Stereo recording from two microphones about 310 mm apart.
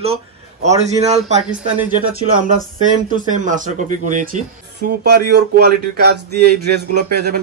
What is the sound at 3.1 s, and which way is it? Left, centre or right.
Speech, right.